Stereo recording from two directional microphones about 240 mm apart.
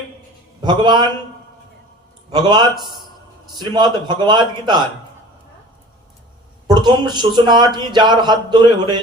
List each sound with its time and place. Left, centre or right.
0.6 s a man's voice: centre
2.3 s a man's voice: centre
6.7 s a man's voice: centre